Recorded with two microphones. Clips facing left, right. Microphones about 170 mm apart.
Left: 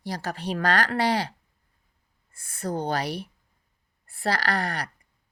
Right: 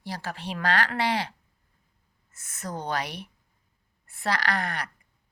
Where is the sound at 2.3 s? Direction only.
30° left (ahead or behind).